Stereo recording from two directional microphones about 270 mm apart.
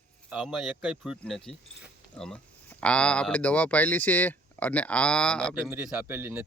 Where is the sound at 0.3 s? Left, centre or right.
Centre.